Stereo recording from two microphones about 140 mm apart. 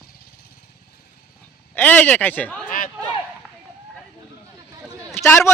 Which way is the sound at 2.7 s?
75° left (ahead or behind).